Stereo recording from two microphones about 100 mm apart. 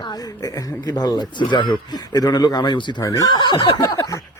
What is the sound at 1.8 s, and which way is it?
A man's voice, 40° left (ahead or behind).